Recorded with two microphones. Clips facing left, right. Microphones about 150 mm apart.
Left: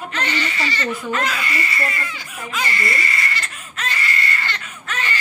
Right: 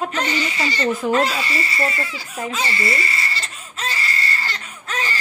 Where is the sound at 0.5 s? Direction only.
40° right (ahead or behind).